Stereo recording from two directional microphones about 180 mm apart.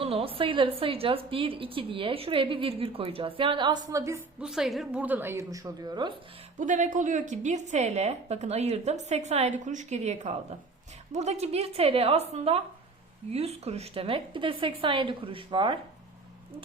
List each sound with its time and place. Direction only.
0.0 s a woman's voice: 30° right (ahead or behind); by 4.2 s 15° right (ahead or behind)
4.4 s a woman's voice: 5° right (ahead or behind); by 6.1 s 25° right (ahead or behind)
6.6 s a woman's voice: 45° right (ahead or behind); by 15.8 s 30° right (ahead or behind)